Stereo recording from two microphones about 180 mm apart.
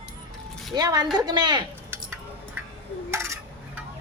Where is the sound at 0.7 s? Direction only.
20° right (ahead or behind).